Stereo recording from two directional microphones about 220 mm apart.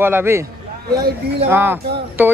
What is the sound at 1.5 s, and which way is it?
Speech, 10° right (ahead or behind).